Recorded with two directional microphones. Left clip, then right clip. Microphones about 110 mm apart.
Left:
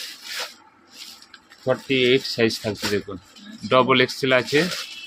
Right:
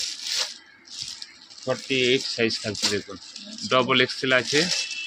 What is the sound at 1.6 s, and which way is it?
Speech, 25° left (ahead or behind).